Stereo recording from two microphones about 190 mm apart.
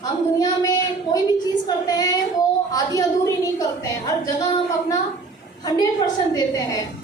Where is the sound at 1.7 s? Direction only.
20° left (ahead or behind).